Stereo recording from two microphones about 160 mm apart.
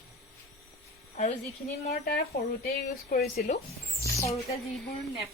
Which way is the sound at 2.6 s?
70° left (ahead or behind).